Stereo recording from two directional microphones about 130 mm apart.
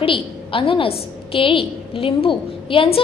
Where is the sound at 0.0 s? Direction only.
45° left (ahead or behind).